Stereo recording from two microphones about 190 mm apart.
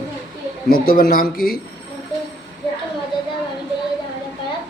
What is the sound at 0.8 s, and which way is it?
Speech, 50° left (ahead or behind).